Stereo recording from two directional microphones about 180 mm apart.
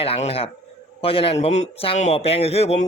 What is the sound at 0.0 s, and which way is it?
A man's voice, 35° left (ahead or behind).